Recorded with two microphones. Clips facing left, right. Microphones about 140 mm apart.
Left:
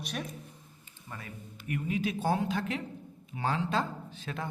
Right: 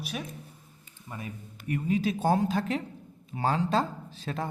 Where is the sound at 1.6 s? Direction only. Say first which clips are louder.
Right 4 dB; 35° right (ahead or behind).